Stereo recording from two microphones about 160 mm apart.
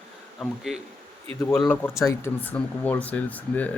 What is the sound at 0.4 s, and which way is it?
Speech, centre (ahead or behind).